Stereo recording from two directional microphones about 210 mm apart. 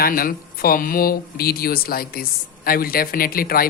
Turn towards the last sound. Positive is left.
turn(degrees=45)  # may be behind; listen again after turning